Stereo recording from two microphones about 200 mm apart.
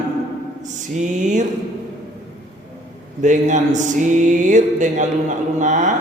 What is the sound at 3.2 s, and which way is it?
Speech, 35° right (ahead or behind).